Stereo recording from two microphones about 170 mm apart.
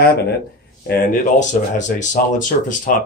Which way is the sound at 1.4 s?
45° left (ahead or behind).